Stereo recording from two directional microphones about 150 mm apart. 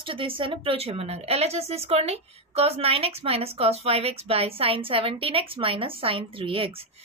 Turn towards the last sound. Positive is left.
turn(degrees=-35)  # may be behind; listen again after turning